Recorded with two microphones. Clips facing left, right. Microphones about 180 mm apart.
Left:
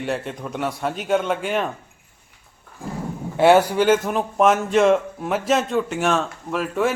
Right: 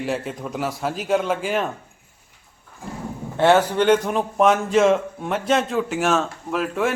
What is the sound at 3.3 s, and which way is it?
Speech, 10° left (ahead or behind).